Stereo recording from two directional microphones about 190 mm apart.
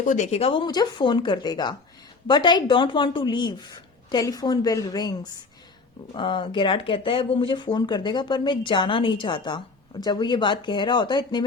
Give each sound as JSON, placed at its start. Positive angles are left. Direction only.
{"t": 0.0, "sound": "speech", "side_deg": 40}